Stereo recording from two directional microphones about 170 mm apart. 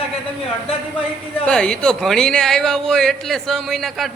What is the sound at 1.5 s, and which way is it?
A man's voice, 5° left (ahead or behind).